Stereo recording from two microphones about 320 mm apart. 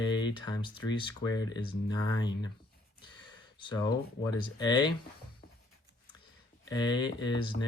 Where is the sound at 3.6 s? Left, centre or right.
Centre.